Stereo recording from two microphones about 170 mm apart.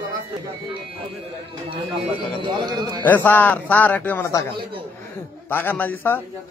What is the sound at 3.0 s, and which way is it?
A man's voice, 10° left (ahead or behind).